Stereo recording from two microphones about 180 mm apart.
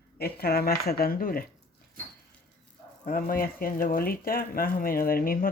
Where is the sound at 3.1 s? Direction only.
50° left (ahead or behind).